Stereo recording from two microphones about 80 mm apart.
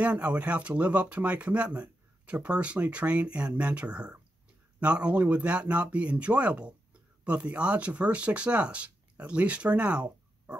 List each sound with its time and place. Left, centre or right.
0.0 s speech: centre